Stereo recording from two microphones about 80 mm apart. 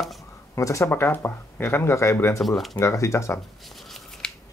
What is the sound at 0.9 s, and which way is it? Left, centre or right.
Speech, left.